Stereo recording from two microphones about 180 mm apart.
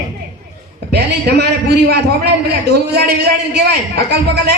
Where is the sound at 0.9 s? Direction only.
65° right (ahead or behind).